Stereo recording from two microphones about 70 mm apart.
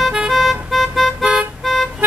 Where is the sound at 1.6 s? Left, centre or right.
Centre.